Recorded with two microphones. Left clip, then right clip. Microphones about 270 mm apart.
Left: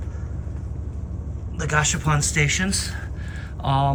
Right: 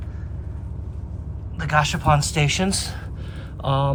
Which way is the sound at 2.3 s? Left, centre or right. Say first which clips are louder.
Even; centre.